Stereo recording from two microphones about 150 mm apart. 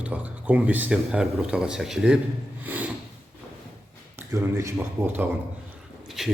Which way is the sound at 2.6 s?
10° right (ahead or behind).